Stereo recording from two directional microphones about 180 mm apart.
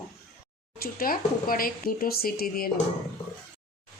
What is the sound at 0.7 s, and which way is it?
Speech, 55° left (ahead or behind).